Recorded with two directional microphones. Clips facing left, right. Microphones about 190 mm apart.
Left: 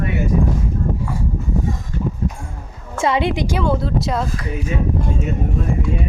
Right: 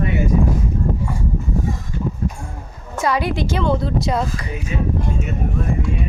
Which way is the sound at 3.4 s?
10° left (ahead or behind).